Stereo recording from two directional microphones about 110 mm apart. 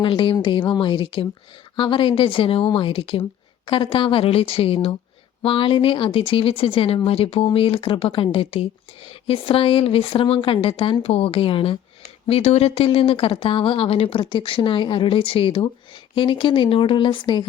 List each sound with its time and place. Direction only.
0.0 s speech: 55° left (ahead or behind)
12.3 s speech: 70° left (ahead or behind)
14.2 s speech: 45° left (ahead or behind)